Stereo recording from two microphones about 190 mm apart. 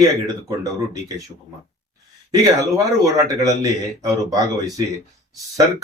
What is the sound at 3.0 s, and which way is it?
Speech, 15° right (ahead or behind).